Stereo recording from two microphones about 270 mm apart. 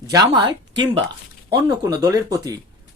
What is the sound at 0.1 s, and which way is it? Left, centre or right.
Speech, centre.